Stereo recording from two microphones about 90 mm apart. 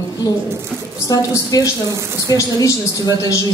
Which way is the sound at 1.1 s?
40° left (ahead or behind).